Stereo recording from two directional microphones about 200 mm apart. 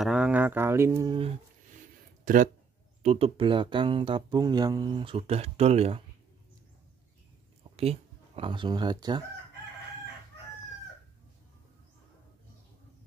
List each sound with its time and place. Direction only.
0.0 s speech: 5° right (ahead or behind); by 1.3 s 20° right (ahead or behind)
2.2 s speech: 40° right (ahead or behind)
7.7 s speech: 30° right (ahead or behind)